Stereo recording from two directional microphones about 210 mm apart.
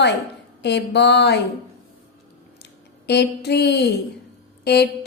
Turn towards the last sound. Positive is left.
turn(degrees=50)  # may be behind; listen again after turning